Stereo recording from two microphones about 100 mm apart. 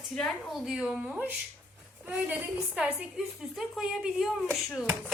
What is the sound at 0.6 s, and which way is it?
A woman's voice, 10° right (ahead or behind).